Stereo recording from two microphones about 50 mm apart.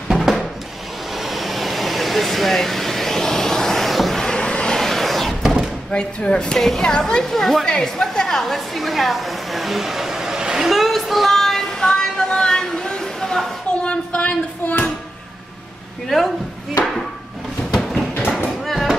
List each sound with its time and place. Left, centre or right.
0.1 s music: centre
1.1 s vehicle: centre
4.2 s vehicle: centre
4.8 s a sound: centre
5.9 s a woman's voice: centre
10.7 s child singing: centre
13.8 s a sound: left
16.1 s speech: centre
18.7 s a sound: centre